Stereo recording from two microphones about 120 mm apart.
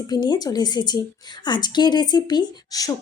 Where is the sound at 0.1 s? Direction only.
35° left (ahead or behind).